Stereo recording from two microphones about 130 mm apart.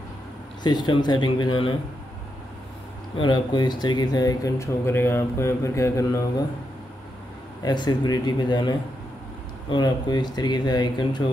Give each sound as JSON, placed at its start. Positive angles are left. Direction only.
{"t": 0.7, "sound": "speech", "side_deg": 35}
{"t": 3.2, "sound": "speech", "side_deg": 35}
{"t": 7.6, "sound": "speech", "side_deg": 35}